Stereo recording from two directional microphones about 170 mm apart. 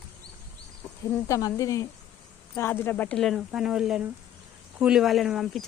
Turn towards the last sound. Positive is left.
turn(degrees=0)  # may be behind; listen again after turning